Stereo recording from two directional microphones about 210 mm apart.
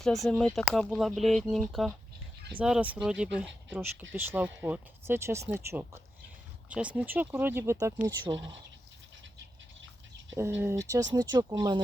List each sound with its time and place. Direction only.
0.0 s speech: centre (ahead or behind); by 8.5 s 20° right (ahead or behind)
10.3 s speech: 10° right (ahead or behind)